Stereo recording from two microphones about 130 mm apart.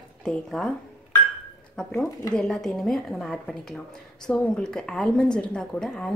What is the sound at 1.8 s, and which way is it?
A woman's voice, 10° left (ahead or behind).